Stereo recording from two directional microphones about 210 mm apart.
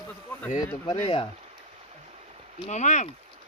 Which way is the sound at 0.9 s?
25° left (ahead or behind).